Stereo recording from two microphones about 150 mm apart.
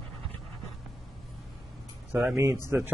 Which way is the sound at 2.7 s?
20° right (ahead or behind).